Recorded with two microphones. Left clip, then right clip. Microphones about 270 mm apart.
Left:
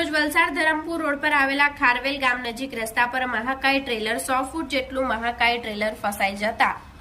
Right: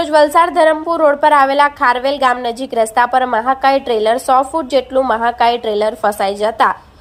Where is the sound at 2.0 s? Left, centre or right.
Centre.